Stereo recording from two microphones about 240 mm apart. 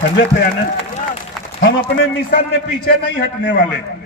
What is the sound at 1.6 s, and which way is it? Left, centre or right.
A man's voice, left.